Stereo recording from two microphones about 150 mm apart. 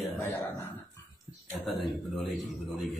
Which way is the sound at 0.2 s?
15° left (ahead or behind).